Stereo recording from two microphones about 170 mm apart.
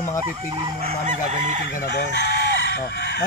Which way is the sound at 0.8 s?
45° right (ahead or behind).